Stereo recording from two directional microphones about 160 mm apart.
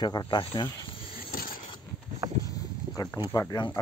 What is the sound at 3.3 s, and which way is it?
Speech, 25° left (ahead or behind).